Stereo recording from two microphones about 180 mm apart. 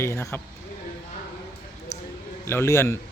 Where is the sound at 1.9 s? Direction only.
15° left (ahead or behind).